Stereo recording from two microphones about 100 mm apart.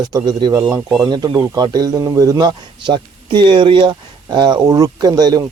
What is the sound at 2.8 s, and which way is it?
A man's voice, 50° right (ahead or behind).